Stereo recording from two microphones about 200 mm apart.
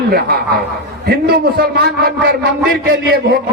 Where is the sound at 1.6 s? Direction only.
50° right (ahead or behind).